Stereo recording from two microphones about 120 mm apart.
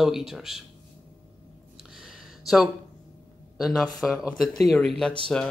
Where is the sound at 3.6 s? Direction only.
Centre (ahead or behind).